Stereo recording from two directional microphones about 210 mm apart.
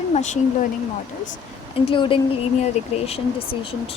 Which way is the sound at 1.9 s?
25° left (ahead or behind).